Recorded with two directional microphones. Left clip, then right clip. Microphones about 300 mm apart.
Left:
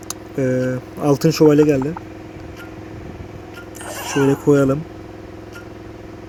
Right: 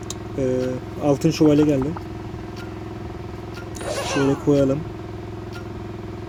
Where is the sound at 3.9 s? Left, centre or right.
Centre.